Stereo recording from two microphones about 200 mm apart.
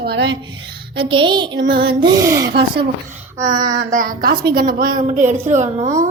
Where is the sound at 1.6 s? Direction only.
55° right (ahead or behind).